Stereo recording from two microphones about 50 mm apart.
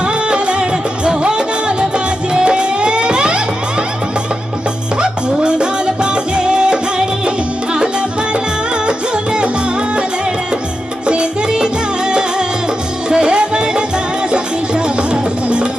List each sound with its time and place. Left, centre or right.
0.0 s music: centre
4.9 s music: centre